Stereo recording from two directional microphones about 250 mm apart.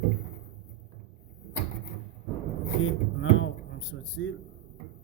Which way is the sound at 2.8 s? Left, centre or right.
Left.